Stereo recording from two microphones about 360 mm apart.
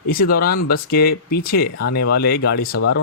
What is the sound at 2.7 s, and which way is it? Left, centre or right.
Speech, left.